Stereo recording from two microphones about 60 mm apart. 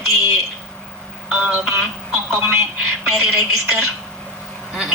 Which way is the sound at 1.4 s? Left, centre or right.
Right.